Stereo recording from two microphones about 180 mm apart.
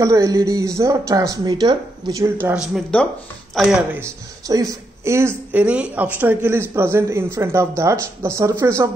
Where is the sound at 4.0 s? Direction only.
20° right (ahead or behind).